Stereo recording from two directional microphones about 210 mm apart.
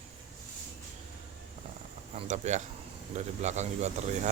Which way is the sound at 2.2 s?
35° right (ahead or behind).